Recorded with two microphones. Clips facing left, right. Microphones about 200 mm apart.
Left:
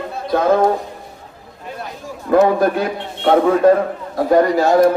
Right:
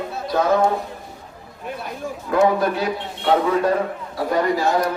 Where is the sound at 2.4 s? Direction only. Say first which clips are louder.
Left 3 dB; 50° left (ahead or behind).